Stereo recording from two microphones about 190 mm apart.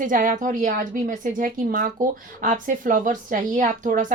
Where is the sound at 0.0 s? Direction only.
45° right (ahead or behind).